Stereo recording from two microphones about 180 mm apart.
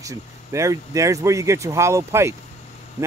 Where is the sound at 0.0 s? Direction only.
15° right (ahead or behind).